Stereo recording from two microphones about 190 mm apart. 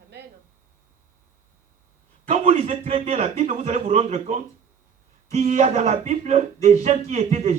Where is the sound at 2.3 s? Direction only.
35° right (ahead or behind).